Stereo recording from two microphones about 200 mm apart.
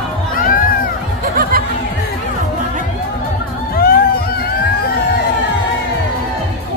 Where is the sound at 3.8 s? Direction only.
50° left (ahead or behind).